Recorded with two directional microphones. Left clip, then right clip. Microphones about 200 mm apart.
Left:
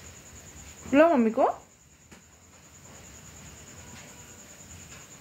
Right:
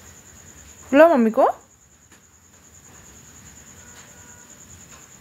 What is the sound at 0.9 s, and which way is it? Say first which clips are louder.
Speech: right 7 dB; 45° right (ahead or behind).